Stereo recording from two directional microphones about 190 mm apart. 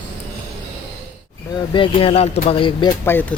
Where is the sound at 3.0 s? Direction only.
10° left (ahead or behind).